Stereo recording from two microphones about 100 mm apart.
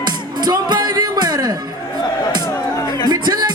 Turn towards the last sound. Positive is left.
turn(degrees=-45)  # may be behind; listen again after turning